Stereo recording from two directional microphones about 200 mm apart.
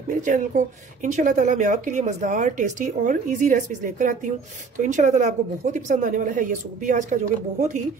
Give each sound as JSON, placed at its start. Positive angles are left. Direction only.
{"t": 0.1, "sound": "a woman's voice", "side_deg": -40}